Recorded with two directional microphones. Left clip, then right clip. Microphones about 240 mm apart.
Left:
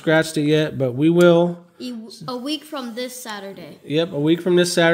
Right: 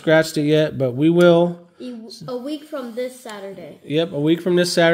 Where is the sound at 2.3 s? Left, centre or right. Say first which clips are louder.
Even; left.